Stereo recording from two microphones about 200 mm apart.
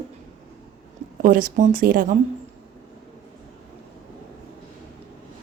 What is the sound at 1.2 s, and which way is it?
Speech, 45° right (ahead or behind).